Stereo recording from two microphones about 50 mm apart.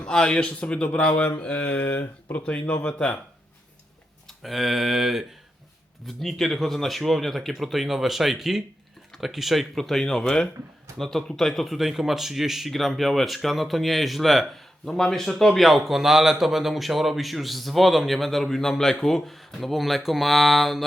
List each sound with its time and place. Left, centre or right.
0.0 s speech: centre
4.3 s speech: centre